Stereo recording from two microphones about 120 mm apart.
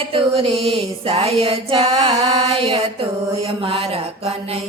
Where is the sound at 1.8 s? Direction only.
55° right (ahead or behind).